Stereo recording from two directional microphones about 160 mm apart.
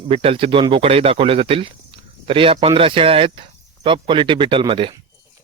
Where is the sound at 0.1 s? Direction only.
35° right (ahead or behind).